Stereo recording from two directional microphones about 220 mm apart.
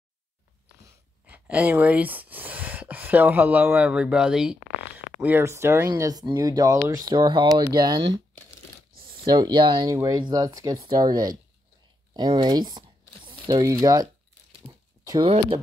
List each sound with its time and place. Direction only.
1.2 s speech: 5° right (ahead or behind)
9.2 s speech: 20° right (ahead or behind)
14.7 s a sound: 15° right (ahead or behind)